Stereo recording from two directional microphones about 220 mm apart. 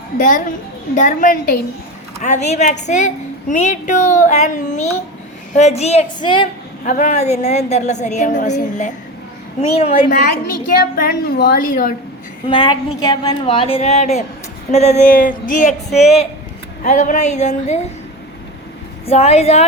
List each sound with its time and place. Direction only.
0.2 s a woman's voice: 35° left (ahead or behind); by 6.5 s 20° left (ahead or behind)
6.8 s a woman's voice: 35° left (ahead or behind)
10.7 s a woman's voice: 40° left (ahead or behind)
12.5 s a woman's voice: 20° left (ahead or behind)
19.0 s a woman's voice: 30° left (ahead or behind)